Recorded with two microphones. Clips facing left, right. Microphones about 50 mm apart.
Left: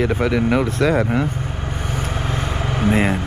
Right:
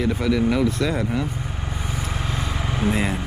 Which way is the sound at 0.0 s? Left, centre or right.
Left.